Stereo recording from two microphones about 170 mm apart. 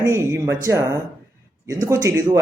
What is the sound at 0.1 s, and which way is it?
Speech, 15° right (ahead or behind).